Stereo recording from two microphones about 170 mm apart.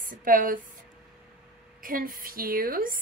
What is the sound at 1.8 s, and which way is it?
A woman's voice, 55° right (ahead or behind).